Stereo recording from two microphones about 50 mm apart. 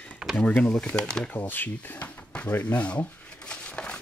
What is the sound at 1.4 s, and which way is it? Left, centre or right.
Speech, left.